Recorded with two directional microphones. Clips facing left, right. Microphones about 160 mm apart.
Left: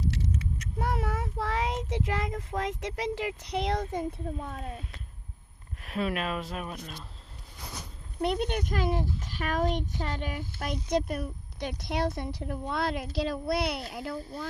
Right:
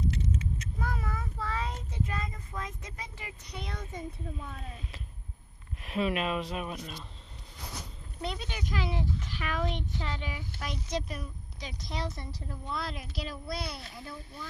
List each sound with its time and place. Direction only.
0.8 s child singing: 75° left (ahead or behind)
4.3 s speech: 45° left (ahead or behind)
5.8 s speech: centre (ahead or behind)
8.2 s a child's voice: 60° left (ahead or behind)
13.9 s speech: 80° left
14.2 s speech: 35° left (ahead or behind)